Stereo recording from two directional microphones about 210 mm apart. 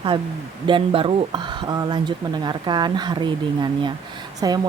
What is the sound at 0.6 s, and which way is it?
Speech, 25° right (ahead or behind).